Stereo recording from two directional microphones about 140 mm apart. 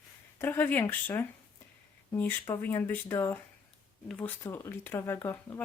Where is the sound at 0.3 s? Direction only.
15° left (ahead or behind).